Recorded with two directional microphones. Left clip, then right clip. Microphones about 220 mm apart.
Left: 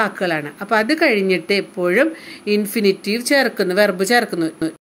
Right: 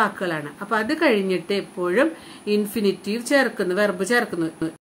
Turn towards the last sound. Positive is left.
turn(degrees=15)  # may be behind; listen again after turning